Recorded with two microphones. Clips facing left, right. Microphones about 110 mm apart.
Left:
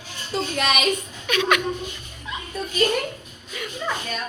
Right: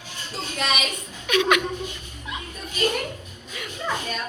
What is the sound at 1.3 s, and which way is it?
Speech, 15° right (ahead or behind).